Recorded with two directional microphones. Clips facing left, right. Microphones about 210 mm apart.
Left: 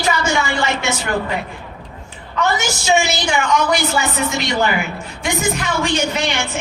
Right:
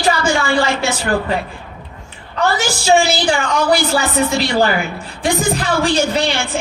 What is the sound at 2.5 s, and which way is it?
A woman's voice, 35° right (ahead or behind).